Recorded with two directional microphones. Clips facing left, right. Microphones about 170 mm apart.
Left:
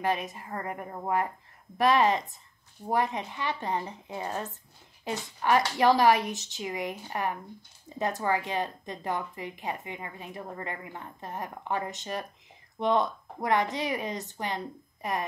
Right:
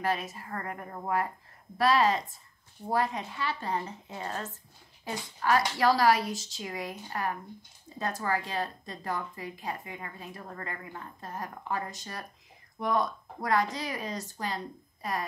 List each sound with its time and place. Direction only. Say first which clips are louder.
0.0 s a woman's voice: left 2 dB; 20° left (ahead or behind)